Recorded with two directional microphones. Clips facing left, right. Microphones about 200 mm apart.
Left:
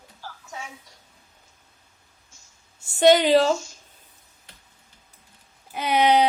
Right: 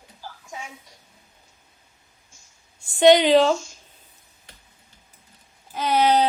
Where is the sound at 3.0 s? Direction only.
5° left (ahead or behind).